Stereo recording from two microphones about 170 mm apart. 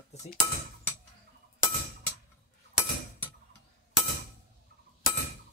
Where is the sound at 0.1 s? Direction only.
40° left (ahead or behind).